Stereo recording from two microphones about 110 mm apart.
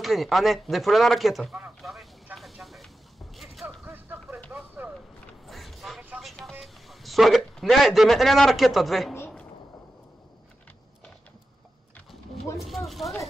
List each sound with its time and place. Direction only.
0.0 s a man's voice: centre (ahead or behind)
2.3 s vehicle: centre (ahead or behind)
3.8 s a sound: 20° right (ahead or behind)
4.5 s vehicle: 15° right (ahead or behind)
5.5 s a sound: centre (ahead or behind)
6.2 s vehicle: centre (ahead or behind)
6.6 s a man's voice: centre (ahead or behind)
12.5 s a man's voice: centre (ahead or behind)